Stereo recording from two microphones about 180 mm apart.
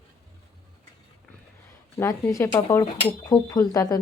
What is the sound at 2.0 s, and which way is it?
Speech, 15° left (ahead or behind).